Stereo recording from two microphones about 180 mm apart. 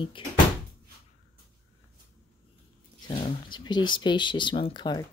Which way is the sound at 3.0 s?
25° left (ahead or behind).